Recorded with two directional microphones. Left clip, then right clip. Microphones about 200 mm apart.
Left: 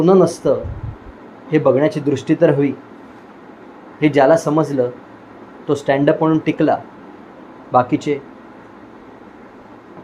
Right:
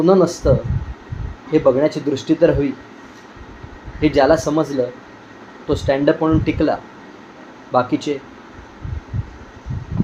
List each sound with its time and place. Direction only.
0.0 s speech: 20° left (ahead or behind)
1.5 s speech: 20° left (ahead or behind)
4.0 s speech: 20° left (ahead or behind)
5.6 s speech: 20° left (ahead or behind)